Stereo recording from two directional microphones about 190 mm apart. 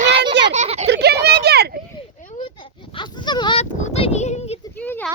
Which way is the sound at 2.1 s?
40° left (ahead or behind).